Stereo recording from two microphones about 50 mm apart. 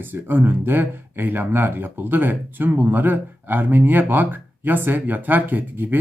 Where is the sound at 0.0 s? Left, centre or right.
Right.